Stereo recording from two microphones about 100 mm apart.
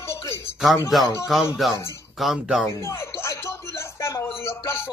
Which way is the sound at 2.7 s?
30° left (ahead or behind).